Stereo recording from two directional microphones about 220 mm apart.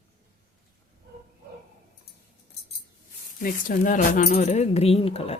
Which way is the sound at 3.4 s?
35° left (ahead or behind).